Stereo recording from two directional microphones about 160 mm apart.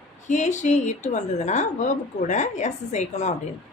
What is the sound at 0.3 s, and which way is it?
A woman's voice, 50° left (ahead or behind).